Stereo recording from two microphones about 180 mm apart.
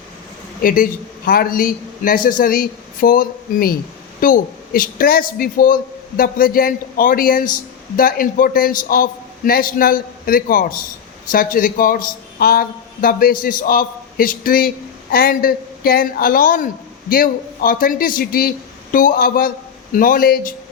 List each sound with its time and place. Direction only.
0.6 s a man's voice: 50° left (ahead or behind)